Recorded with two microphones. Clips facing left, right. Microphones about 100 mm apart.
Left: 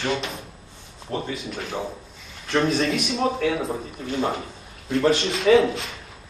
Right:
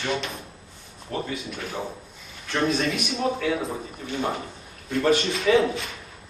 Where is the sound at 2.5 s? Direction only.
35° left (ahead or behind).